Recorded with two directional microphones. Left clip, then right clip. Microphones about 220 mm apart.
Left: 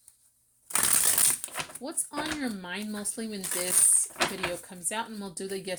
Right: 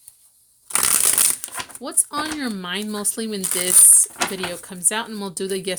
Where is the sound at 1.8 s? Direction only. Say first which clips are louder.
Right 10 dB; 40° right (ahead or behind).